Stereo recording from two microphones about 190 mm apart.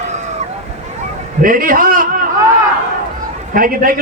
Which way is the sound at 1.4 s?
45° right (ahead or behind).